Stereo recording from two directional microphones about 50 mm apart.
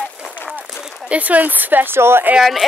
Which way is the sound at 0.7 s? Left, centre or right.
Centre.